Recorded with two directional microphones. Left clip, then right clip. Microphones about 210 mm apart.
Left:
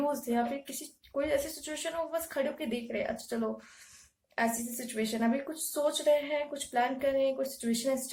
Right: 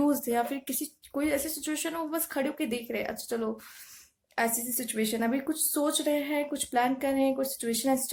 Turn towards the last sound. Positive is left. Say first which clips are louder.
# right 3 dB
turn(degrees=-50)  # may be behind; listen again after turning